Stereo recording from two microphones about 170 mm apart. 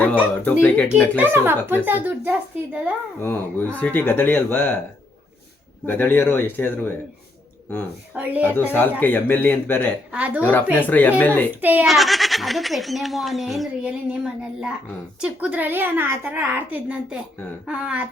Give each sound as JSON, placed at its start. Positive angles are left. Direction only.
{"t": 0.4, "sound": "speech", "side_deg": 10}
{"t": 1.1, "sound": "a woman's voice", "side_deg": -10}
{"t": 3.2, "sound": "speech", "side_deg": 10}
{"t": 5.8, "sound": "speech", "side_deg": 10}
{"t": 8.1, "sound": "a woman's voice", "side_deg": -10}
{"t": 8.7, "sound": "speech", "side_deg": 10}
{"t": 10.1, "sound": "a woman's voice", "side_deg": -10}
{"t": 10.4, "sound": "speech", "side_deg": 10}
{"t": 11.6, "sound": "a child's voice", "side_deg": -10}
{"t": 15.2, "sound": "a woman's voice", "side_deg": -5}